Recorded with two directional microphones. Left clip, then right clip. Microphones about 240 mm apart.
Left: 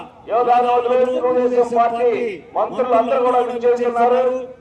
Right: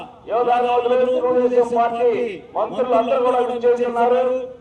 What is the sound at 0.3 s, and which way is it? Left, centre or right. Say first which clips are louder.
A man's voice: left 3 dB; left.